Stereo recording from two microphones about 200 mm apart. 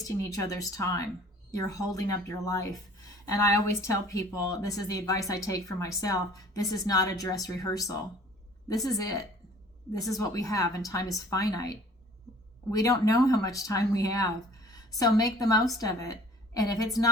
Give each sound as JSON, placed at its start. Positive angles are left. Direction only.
{"t": 0.0, "sound": "a woman's voice", "side_deg": 15}
{"t": 3.8, "sound": "a woman's voice", "side_deg": 15}